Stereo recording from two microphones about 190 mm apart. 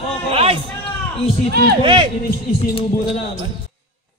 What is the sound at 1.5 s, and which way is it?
Speech, 55° right (ahead or behind).